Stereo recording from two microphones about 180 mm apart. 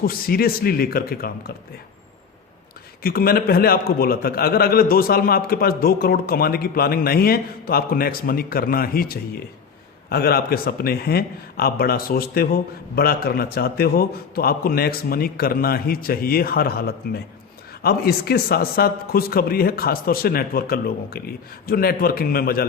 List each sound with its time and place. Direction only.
0.0 s a man's voice: 55° left (ahead or behind)
3.0 s a man's voice: 55° left (ahead or behind)